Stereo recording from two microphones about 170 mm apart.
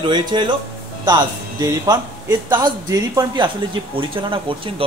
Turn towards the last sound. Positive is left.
turn(degrees=-30)  # may be behind; listen again after turning